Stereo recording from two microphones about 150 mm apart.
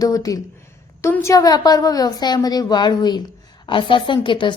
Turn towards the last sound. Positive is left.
turn(degrees=35)  # may be behind; listen again after turning